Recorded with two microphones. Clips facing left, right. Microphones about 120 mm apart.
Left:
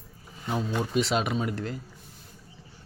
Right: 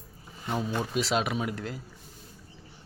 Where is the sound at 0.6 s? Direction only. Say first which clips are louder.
Left 3 dB; 5° right (ahead or behind).